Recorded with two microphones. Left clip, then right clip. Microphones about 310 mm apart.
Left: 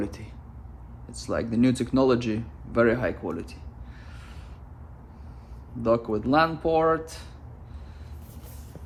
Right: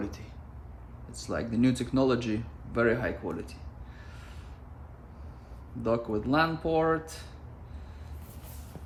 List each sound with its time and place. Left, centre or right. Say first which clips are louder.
1.1 s speech: left 5 dB; left
5.8 s speech: left 5 dB; left